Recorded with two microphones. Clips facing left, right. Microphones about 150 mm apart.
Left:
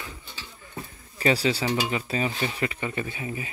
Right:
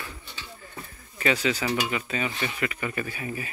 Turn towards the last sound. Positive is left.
turn(degrees=20)  # may be behind; listen again after turning